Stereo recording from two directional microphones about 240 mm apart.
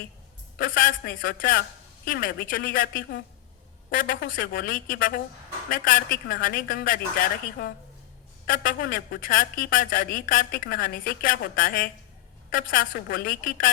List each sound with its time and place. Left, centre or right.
0.6 s a woman's voice: left
8.4 s a woman's voice: left